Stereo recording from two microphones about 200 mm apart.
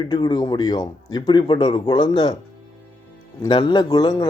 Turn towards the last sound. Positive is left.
turn(degrees=20)  # may be behind; listen again after turning